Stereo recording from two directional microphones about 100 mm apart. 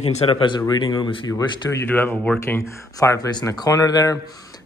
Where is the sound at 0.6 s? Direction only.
45° left (ahead or behind).